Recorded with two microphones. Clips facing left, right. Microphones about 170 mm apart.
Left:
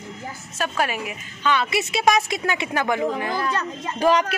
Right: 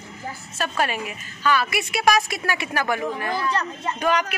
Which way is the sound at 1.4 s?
20° left (ahead or behind).